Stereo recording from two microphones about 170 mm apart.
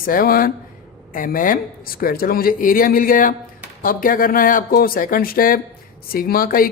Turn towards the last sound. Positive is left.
turn(degrees=60)  # may be behind; listen again after turning